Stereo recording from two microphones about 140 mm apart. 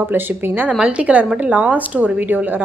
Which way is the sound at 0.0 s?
15° right (ahead or behind).